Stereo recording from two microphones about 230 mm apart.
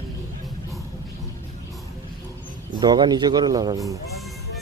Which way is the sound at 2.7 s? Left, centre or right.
Centre.